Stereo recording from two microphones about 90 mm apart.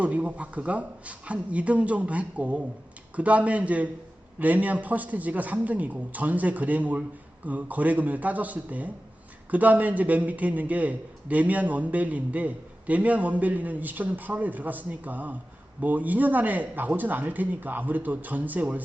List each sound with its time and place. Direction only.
0.0 s a man's voice: 15° right (ahead or behind)